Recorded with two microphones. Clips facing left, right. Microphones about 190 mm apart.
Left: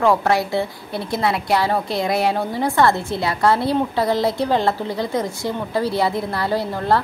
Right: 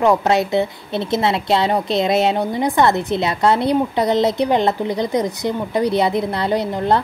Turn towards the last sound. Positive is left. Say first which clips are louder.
# right 2 dB
turn(degrees=-20)  # may be behind; listen again after turning